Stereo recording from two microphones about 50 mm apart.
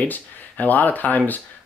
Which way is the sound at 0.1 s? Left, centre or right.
Left.